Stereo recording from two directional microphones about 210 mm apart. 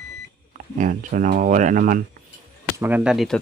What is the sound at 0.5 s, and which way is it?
Speech, 40° right (ahead or behind).